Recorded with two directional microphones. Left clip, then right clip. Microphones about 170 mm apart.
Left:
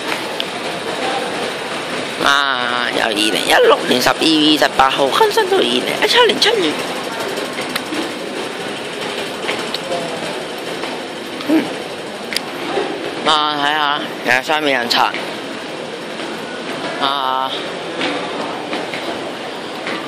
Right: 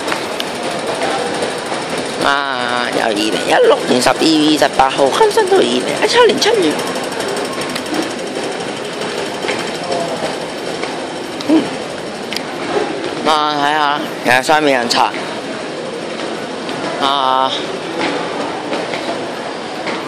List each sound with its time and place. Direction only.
2.2 s speech: centre (ahead or behind)
11.5 s a sound: 10° right (ahead or behind)
13.3 s speech: 10° right (ahead or behind)
17.0 s speech: 15° right (ahead or behind)